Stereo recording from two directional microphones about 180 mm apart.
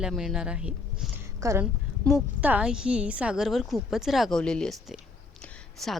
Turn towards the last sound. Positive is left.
turn(degrees=0)  # may be behind; listen again after turning